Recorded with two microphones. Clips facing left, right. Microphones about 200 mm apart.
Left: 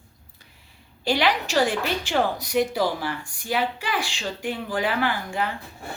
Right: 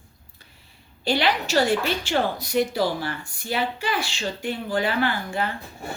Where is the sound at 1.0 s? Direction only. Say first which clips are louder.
Even; 15° left (ahead or behind).